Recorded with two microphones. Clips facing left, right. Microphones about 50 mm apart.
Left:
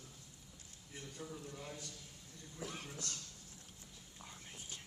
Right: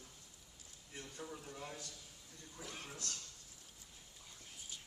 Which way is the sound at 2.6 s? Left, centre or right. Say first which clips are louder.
Left 4 dB; centre.